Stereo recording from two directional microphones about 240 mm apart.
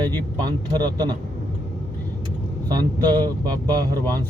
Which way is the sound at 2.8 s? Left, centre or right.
Centre.